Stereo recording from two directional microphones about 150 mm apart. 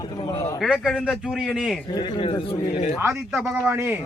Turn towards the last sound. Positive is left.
turn(degrees=-5)  # may be behind; listen again after turning